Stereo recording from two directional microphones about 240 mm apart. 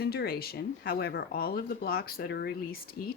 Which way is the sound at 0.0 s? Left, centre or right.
Left.